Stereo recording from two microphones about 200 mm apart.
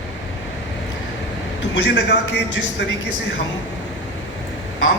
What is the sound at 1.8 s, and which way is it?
Speech, 60° left (ahead or behind).